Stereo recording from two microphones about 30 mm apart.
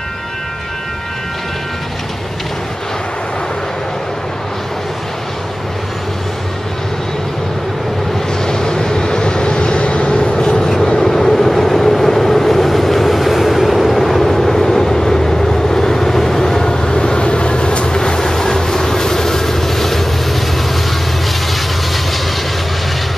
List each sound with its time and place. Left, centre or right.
8.5 s vehicle: left
10.2 s vehicle: left
10.6 s vehicle: centre
16.6 s vehicle: left
17.8 s train: left